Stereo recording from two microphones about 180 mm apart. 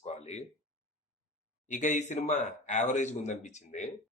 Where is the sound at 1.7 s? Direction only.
40° left (ahead or behind).